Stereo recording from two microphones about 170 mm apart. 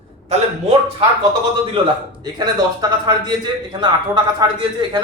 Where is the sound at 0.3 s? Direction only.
35° right (ahead or behind).